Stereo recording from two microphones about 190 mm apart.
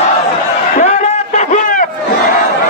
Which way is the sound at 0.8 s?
40° left (ahead or behind).